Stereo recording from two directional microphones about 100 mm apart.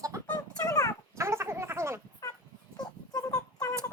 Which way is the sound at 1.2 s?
25° right (ahead or behind).